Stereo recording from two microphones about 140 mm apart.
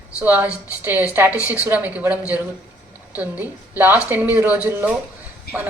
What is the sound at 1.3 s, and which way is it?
Speech, 20° left (ahead or behind).